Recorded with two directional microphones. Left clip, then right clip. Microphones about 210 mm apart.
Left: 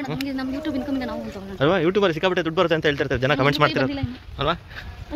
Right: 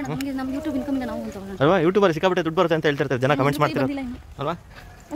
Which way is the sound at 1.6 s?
30° right (ahead or behind).